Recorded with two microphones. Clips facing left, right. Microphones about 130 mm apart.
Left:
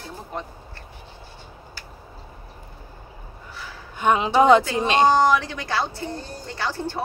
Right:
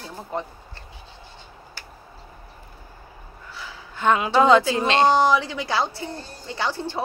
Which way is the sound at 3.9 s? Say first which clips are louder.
Left 1 dB; 20° left (ahead or behind).